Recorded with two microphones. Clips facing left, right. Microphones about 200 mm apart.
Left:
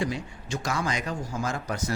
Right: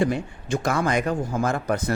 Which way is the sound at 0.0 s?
55° right (ahead or behind).